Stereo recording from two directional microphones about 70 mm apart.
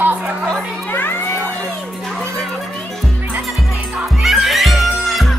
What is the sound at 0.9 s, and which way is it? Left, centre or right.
Speech, left.